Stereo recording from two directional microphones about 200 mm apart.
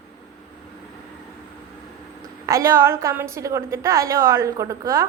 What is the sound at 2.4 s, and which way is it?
A woman's voice, 15° right (ahead or behind).